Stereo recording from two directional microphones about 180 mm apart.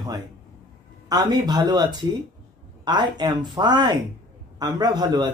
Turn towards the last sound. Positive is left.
turn(degrees=-25)  # may be behind; listen again after turning